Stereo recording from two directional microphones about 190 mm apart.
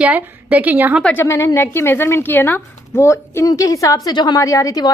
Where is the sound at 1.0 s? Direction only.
5° left (ahead or behind).